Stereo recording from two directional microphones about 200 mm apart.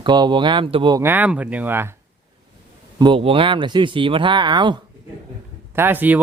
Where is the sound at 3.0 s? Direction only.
25° right (ahead or behind).